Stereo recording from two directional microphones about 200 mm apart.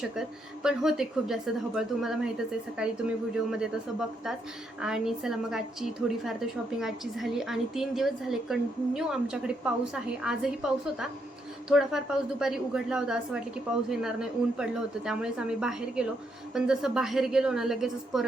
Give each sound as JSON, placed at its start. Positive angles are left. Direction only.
{"t": 0.0, "sound": "a woman's voice", "side_deg": 0}
{"t": 4.8, "sound": "a woman's voice", "side_deg": -5}